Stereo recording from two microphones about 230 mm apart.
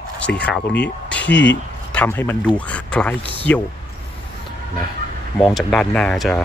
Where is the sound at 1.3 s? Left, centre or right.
Left.